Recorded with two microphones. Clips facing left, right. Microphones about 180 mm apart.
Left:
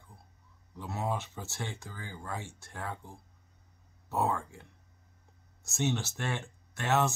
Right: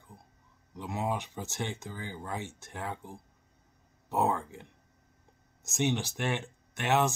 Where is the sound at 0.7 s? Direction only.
15° right (ahead or behind).